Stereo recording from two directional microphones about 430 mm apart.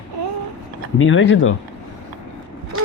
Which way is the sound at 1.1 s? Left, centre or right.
Left.